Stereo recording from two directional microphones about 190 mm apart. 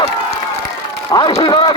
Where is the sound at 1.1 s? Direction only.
25° left (ahead or behind).